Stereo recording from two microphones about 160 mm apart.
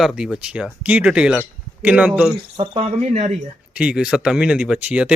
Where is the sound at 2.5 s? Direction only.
35° right (ahead or behind).